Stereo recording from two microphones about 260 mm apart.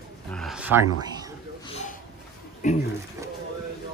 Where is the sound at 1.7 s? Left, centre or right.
Left.